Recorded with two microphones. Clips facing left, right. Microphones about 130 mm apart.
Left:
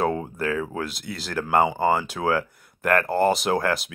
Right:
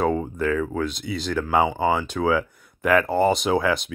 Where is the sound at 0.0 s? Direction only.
5° left (ahead or behind).